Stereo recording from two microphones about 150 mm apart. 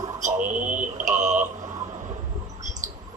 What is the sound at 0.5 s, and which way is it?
Speech, 60° right (ahead or behind).